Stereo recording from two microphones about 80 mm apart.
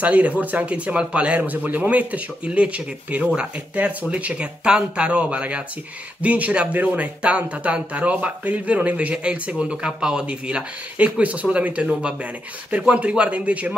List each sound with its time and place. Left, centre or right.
0.0 s speech: centre